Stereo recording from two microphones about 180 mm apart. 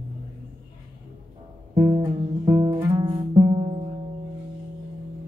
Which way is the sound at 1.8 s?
25° right (ahead or behind).